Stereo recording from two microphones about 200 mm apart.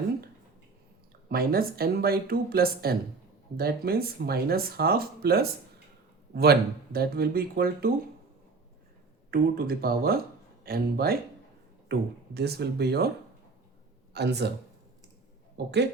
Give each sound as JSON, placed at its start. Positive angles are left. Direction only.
{"t": 1.3, "sound": "speech", "side_deg": -50}
{"t": 9.3, "sound": "speech", "side_deg": -50}
{"t": 14.1, "sound": "speech", "side_deg": -55}
{"t": 15.5, "sound": "speech", "side_deg": -60}